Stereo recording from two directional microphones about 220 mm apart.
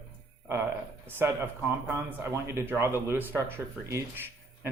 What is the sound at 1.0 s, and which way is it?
Speech, 10° right (ahead or behind).